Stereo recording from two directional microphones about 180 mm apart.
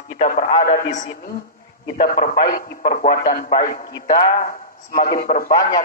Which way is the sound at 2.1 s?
50° left (ahead or behind).